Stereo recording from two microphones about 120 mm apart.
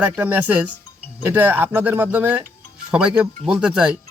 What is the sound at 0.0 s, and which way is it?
Speech, 15° right (ahead or behind).